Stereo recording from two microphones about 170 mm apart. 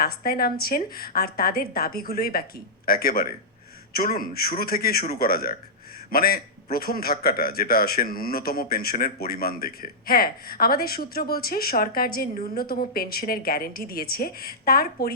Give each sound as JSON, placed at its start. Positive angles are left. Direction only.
{"t": 0.0, "sound": "a man's voice", "side_deg": 60}